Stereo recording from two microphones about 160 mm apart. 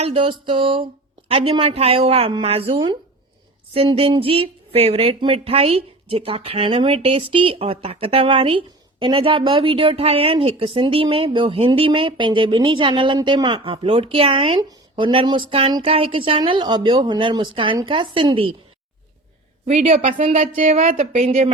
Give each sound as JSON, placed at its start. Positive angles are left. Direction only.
{"t": 0.0, "sound": "speech", "side_deg": -35}
{"t": 19.6, "sound": "a woman's voice", "side_deg": -45}
{"t": 20.2, "sound": "speech", "side_deg": -35}